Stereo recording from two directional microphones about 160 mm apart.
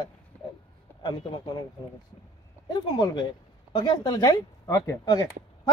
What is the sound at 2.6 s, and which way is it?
Speech, 25° left (ahead or behind).